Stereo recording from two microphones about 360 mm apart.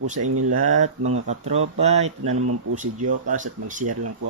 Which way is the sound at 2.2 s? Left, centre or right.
Right.